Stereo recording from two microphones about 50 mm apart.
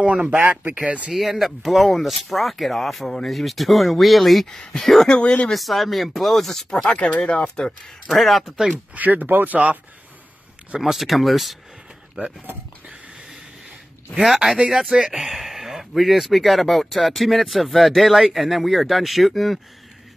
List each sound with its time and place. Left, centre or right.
0.0 s speech: right
1.1 s speech: centre
5.5 s speech: centre
6.8 s speech: centre
7.6 s speech: centre
8.9 s speech: right
10.8 s speech: centre
14.2 s speech: centre